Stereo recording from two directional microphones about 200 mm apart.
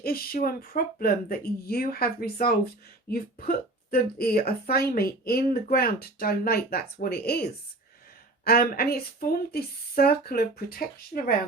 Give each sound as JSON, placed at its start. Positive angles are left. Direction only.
{"t": 0.0, "sound": "speech", "side_deg": 50}
{"t": 8.4, "sound": "speech", "side_deg": 50}